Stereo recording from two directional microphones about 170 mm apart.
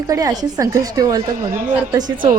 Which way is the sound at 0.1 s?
20° right (ahead or behind).